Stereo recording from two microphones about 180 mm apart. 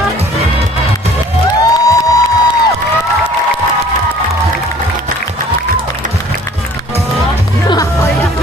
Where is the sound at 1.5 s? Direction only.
20° left (ahead or behind).